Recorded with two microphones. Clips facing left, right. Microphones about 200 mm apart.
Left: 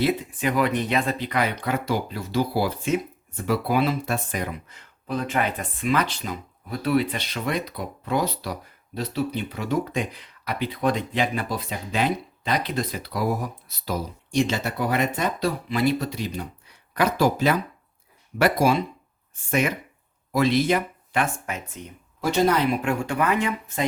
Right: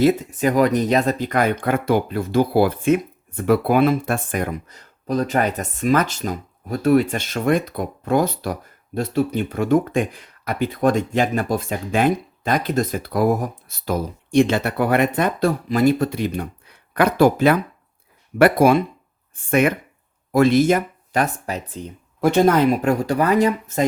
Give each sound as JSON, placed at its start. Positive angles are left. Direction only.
{"t": 0.0, "sound": "speech", "side_deg": -45}
{"t": 22.2, "sound": "speech", "side_deg": -50}